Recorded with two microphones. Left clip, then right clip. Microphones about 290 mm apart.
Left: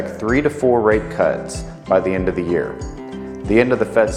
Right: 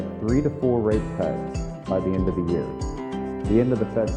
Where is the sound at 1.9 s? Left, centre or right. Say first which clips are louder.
Left 8 dB; centre.